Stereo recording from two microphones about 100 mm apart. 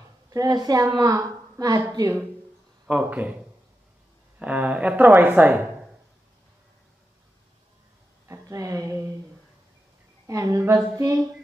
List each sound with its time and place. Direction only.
0.3 s a woman's voice: 35° right (ahead or behind)
2.9 s speech: 15° right (ahead or behind)
8.3 s a sound: 30° right (ahead or behind)
10.2 s a woman's voice: 30° right (ahead or behind)